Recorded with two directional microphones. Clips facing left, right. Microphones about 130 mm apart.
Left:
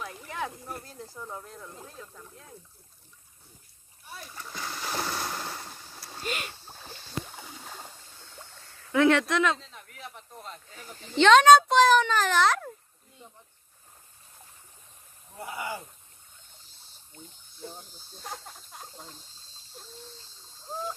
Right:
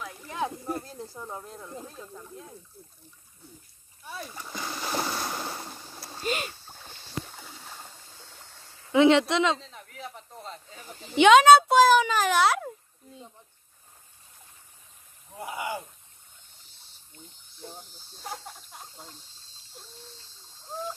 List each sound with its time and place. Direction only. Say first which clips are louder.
0.3 s snake: right 6 dB; 20° right (ahead or behind)
4.3 s splash: left 1 dB; 10° right (ahead or behind)
8.9 s speech: right 3 dB; 20° right (ahead or behind)
9.7 s snake: right 3 dB; 35° right (ahead or behind)
11.1 s a child's voice: right 1 dB; 10° right (ahead or behind)
15.3 s a child's voice: right 2 dB; 20° right (ahead or behind)
17.6 s speech: left 1 dB; centre (ahead or behind)